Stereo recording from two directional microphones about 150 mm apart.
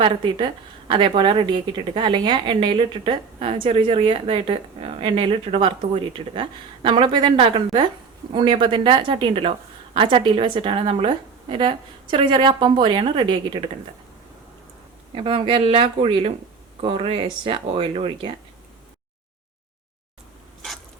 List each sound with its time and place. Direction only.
0.0 s a woman's voice: 35° right (ahead or behind)
15.1 s a woman's voice: 40° right (ahead or behind)